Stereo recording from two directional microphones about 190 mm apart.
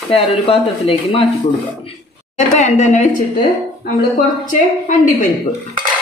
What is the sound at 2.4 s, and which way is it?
Speech, 40° left (ahead or behind).